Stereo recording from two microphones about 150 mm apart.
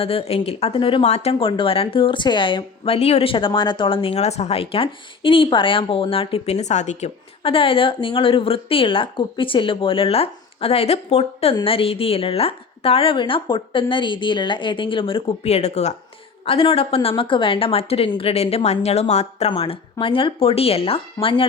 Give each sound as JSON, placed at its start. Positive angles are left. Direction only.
{"t": 0.0, "sound": "speech", "side_deg": 40}